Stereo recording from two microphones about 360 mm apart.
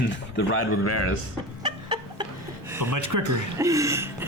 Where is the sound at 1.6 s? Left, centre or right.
Centre.